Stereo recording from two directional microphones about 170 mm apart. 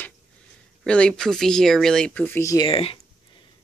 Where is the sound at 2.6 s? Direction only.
35° left (ahead or behind).